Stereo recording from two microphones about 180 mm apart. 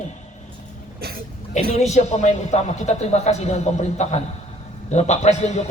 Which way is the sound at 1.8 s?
40° left (ahead or behind).